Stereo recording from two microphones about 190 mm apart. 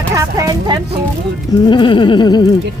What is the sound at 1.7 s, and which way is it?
Music, 25° left (ahead or behind).